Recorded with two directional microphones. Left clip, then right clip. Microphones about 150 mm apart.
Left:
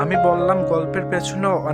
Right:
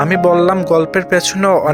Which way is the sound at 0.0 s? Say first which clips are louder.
Right 5 dB; 35° right (ahead or behind).